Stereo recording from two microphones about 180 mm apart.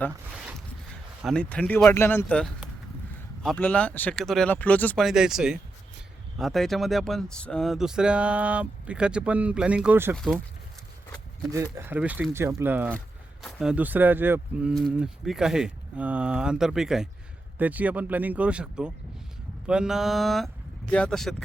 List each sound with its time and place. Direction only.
1.2 s speech: 5° left (ahead or behind)
5.0 s speech: 5° right (ahead or behind)
11.5 s speech: 15° right (ahead or behind)
14.7 s speech: centre (ahead or behind)